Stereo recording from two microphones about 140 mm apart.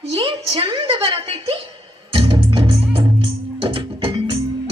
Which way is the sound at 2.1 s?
40° right (ahead or behind).